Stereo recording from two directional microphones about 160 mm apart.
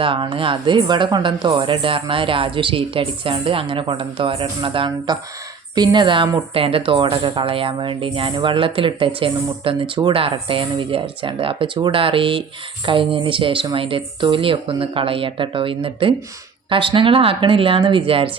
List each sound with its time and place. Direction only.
0.0 s a woman's voice: 30° right (ahead or behind)